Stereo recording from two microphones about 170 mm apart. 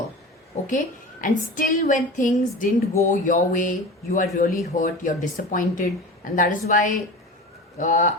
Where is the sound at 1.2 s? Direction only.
50° left (ahead or behind).